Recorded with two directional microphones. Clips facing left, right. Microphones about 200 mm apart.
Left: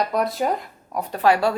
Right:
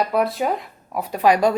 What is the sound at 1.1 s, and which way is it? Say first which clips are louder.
Speech: right 2 dB; 15° right (ahead or behind).